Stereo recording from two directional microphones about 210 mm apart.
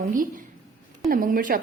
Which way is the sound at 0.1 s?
40° right (ahead or behind).